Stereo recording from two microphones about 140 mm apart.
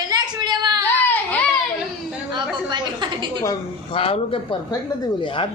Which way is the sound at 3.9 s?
40° left (ahead or behind).